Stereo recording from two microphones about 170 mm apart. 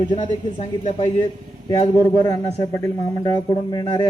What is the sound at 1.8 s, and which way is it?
A man's voice, 25° left (ahead or behind).